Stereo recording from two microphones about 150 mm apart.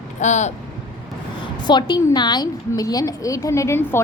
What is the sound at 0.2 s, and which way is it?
Speech, 50° left (ahead or behind).